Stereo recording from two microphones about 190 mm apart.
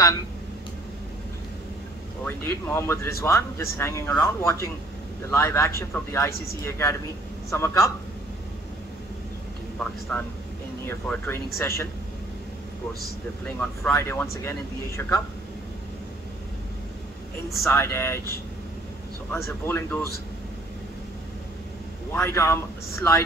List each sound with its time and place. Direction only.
2.2 s speech: 10° left (ahead or behind)
10.9 s speech: 10° left (ahead or behind)
13.6 s speech: 10° left (ahead or behind)
17.6 s speech: 15° left (ahead or behind)
19.3 s speech: 15° left (ahead or behind)
22.1 s speech: 15° left (ahead or behind)